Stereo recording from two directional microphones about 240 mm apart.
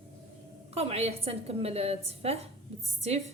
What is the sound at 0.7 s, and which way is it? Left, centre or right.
A woman's voice, right.